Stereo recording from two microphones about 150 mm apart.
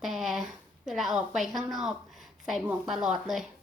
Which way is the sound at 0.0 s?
Centre (ahead or behind).